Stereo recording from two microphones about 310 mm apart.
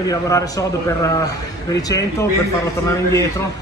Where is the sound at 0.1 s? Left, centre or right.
Centre.